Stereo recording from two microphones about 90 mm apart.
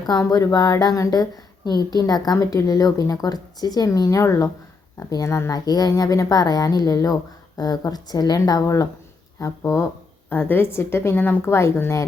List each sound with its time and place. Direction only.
0.0 s a woman's voice: 45° left (ahead or behind)
10.2 s a woman's voice: 20° left (ahead or behind)